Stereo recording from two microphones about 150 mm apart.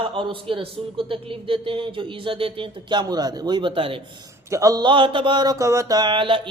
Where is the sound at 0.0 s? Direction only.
35° right (ahead or behind).